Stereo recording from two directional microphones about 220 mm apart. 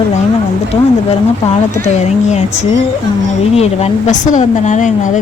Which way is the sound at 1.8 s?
30° left (ahead or behind).